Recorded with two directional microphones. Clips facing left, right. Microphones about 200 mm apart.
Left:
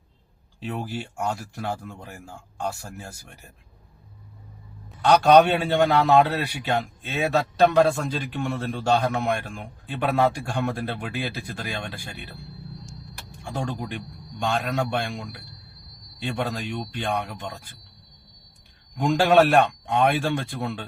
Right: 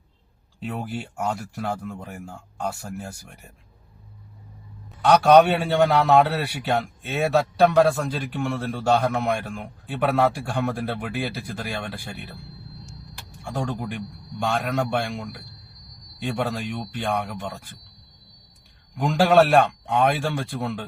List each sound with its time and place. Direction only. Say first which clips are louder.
0.6 s a man's voice: even; centre (ahead or behind)
5.0 s a man's voice: right 1 dB; centre (ahead or behind)
13.4 s a man's voice: right 2 dB; centre (ahead or behind)
19.0 s a man's voice: even; centre (ahead or behind)